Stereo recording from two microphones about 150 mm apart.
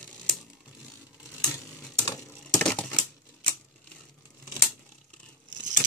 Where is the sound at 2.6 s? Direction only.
10° left (ahead or behind).